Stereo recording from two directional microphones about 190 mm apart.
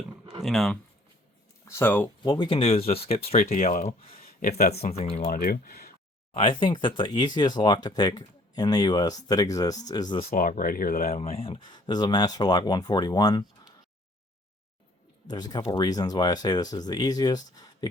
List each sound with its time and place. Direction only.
0.4 s speech: centre (ahead or behind)
1.6 s speech: 10° left (ahead or behind)
2.3 s speech: 25° left (ahead or behind)
4.2 s a sound: 50° left (ahead or behind)
4.7 s speech: 35° left (ahead or behind)
5.3 s speech: 50° left (ahead or behind)
6.3 s speech: 25° left (ahead or behind)
10.3 s speech: 45° left (ahead or behind)
11.1 s speech: 30° left (ahead or behind)
15.3 s speech: 20° left (ahead or behind)